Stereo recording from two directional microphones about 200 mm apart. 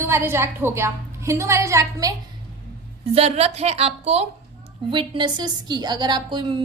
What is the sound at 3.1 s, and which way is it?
A woman's voice, 30° right (ahead or behind).